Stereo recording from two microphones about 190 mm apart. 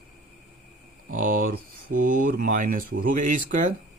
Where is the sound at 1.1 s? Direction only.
45° right (ahead or behind).